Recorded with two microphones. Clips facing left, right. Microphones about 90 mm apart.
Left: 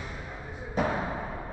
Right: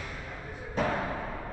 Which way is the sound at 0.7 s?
10° left (ahead or behind).